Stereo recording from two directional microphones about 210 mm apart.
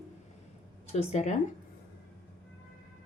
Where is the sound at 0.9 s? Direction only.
30° left (ahead or behind).